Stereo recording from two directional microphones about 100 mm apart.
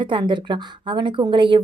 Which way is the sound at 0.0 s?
55° right (ahead or behind).